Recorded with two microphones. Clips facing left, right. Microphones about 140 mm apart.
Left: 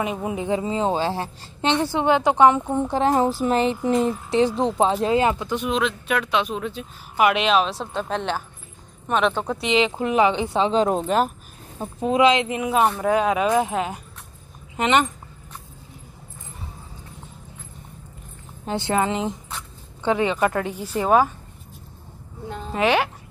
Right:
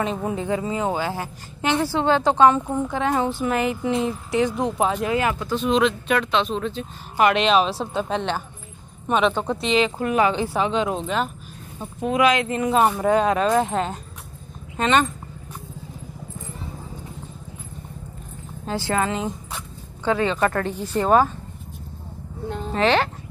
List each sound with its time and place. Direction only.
0.0 s a woman's voice: 10° left (ahead or behind)
2.8 s a sound: 30° left (ahead or behind)
4.3 s a woman's voice: 25° left (ahead or behind)
5.7 s speech: 5° left (ahead or behind)
9.6 s speech: 15° left (ahead or behind)
10.7 s a sound: 40° left (ahead or behind)
12.1 s speech: 25° left (ahead or behind)
18.7 s a woman's voice: 20° left (ahead or behind)
22.5 s speech: 10° left (ahead or behind)